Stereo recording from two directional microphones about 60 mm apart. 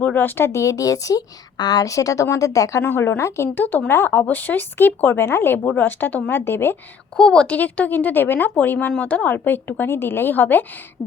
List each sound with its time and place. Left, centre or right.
0.0 s speech: left
0.6 s speech: left
2.8 s a woman's voice: left
3.5 s a woman's voice: left
6.4 s speech: left
7.2 s a woman's voice: centre; by 10.7 s left